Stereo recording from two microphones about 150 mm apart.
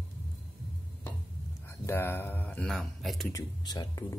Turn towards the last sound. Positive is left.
turn(degrees=25)  # may be behind; listen again after turning